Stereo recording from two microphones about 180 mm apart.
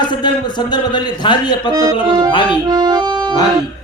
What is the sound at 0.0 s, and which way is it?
A man's voice, 25° left (ahead or behind).